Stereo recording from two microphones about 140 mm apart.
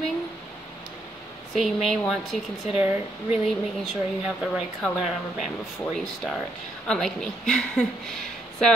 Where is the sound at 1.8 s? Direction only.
Centre (ahead or behind).